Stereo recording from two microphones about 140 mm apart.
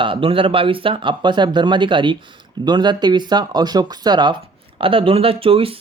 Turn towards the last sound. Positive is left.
turn(degrees=-40)  # may be behind; listen again after turning